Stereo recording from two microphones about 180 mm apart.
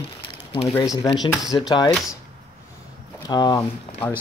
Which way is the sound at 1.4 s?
Centre (ahead or behind).